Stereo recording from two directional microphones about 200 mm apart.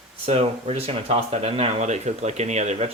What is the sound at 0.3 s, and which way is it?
Speech, 30° right (ahead or behind).